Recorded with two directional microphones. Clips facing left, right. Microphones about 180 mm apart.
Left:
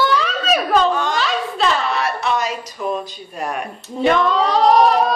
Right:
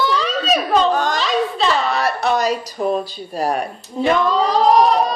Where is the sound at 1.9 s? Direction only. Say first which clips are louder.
Right 2 dB; 40° right (ahead or behind).